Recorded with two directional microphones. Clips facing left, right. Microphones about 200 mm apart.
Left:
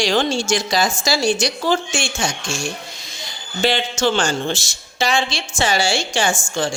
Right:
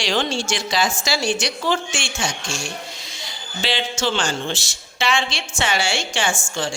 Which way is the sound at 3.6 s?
50° left (ahead or behind).